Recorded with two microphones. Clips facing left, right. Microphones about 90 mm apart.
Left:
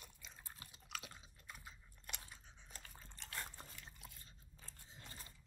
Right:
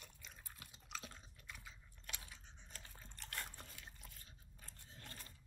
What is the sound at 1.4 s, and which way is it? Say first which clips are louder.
Biting: left 1 dB; 45° left (ahead or behind).